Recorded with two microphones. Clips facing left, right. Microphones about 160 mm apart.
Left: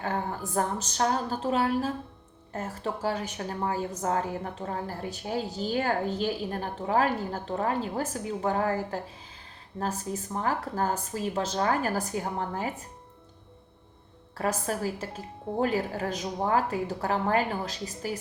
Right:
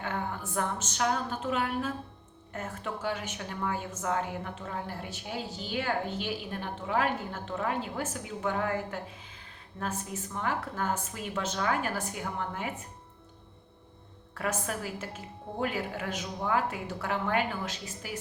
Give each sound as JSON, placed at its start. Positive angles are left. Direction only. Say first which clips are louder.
{"t": 0.0, "sound": "a woman's voice", "louder": "left 3 dB", "side_deg": 35}
{"t": 14.3, "sound": "a woman's voice", "louder": "left 4 dB", "side_deg": 35}